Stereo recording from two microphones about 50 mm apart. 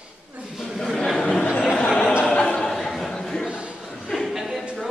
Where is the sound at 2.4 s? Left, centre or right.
Centre.